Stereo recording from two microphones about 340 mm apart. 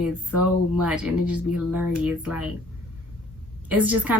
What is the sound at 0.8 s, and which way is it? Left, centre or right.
Speech, centre.